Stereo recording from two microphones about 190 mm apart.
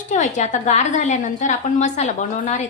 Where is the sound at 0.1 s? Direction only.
40° left (ahead or behind).